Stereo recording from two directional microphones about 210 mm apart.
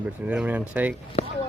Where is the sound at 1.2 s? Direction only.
30° left (ahead or behind).